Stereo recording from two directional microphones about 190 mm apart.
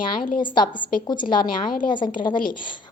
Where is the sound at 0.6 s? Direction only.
45° left (ahead or behind).